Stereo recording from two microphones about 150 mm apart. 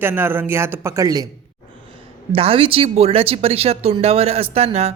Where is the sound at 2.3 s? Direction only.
40° right (ahead or behind).